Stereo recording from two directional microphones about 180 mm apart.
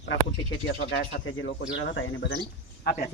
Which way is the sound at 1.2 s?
90° left.